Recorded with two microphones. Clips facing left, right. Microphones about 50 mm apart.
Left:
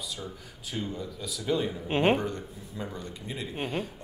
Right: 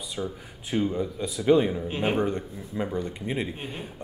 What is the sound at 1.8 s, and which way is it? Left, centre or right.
Speech, left.